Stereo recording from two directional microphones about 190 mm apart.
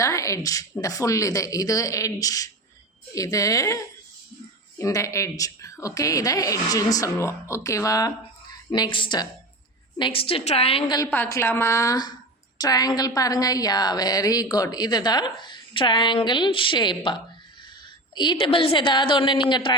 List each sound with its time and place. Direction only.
0.0 s a woman's voice: 15° left (ahead or behind)